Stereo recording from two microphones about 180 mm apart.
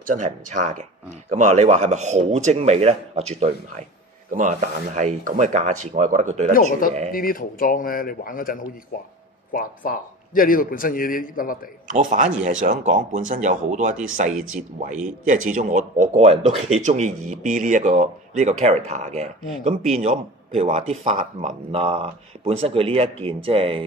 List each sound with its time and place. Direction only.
0.0 s speech: 45° right (ahead or behind)
6.5 s a man's voice: 50° left (ahead or behind)
11.9 s speech: 45° right (ahead or behind)